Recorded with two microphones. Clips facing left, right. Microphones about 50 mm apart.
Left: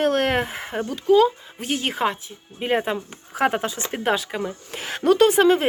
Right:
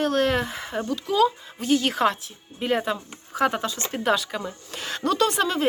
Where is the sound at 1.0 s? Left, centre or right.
Centre.